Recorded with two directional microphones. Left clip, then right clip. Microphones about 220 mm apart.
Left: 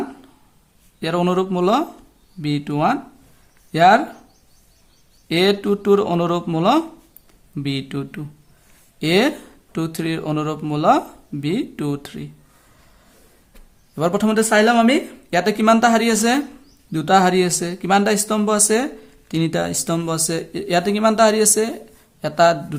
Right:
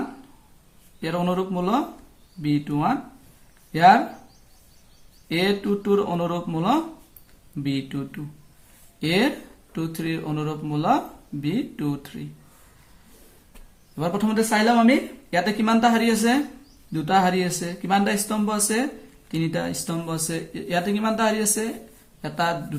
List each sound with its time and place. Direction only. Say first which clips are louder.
1.0 s speech: left 6 dB; 45° left (ahead or behind)
5.3 s speech: left 6 dB; 45° left (ahead or behind)
13.9 s speech: left 6 dB; 45° left (ahead or behind)